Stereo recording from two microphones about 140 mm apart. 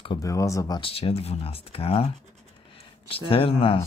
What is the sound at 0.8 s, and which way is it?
Speech, 40° left (ahead or behind).